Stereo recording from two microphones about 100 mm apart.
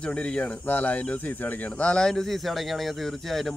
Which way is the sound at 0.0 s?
10° left (ahead or behind).